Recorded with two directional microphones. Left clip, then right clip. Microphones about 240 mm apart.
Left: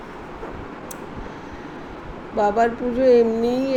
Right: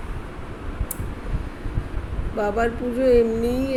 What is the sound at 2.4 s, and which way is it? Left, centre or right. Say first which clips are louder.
Speech: left 4 dB; centre.